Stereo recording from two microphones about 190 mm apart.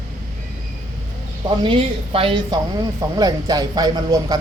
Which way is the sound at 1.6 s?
25° right (ahead or behind).